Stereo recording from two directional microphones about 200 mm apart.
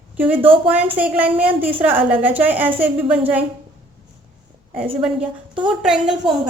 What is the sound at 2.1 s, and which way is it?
Speech, 10° right (ahead or behind).